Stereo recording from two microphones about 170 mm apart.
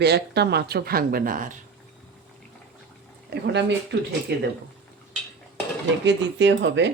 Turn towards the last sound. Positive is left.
turn(degrees=-90)